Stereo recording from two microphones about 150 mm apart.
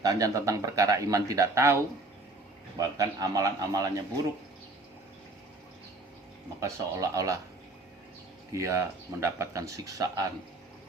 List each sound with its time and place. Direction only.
0.0 s speech: 25° right (ahead or behind)
6.6 s speech: 20° right (ahead or behind)
8.5 s speech: 20° right (ahead or behind)